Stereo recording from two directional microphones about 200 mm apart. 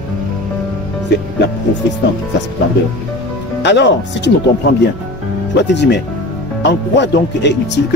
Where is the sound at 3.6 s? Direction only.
60° left (ahead or behind).